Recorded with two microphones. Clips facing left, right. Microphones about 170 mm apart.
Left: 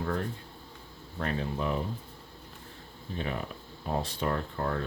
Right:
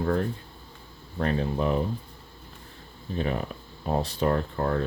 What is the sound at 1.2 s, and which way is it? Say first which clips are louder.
Speech: right 6 dB; 35° right (ahead or behind).